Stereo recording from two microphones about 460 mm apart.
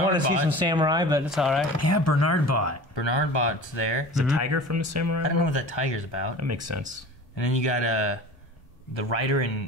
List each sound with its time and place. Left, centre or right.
0.5 s speech: centre
1.8 s speech: left
2.9 s speech: left
4.4 s speech: right
5.3 s speech: left
6.4 s speech: right
7.3 s speech: left
8.9 s a man's voice: left